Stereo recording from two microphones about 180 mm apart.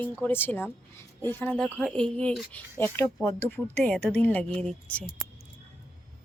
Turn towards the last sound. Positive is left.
turn(degrees=5)  # may be behind; listen again after turning